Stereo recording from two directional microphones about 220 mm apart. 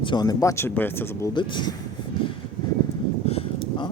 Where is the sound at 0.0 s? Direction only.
20° left (ahead or behind).